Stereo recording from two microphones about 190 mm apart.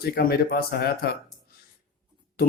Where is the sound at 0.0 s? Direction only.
55° left (ahead or behind).